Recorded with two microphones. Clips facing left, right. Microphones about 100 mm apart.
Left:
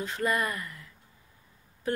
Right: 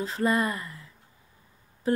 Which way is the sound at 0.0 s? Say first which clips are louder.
Right 3 dB; 30° right (ahead or behind).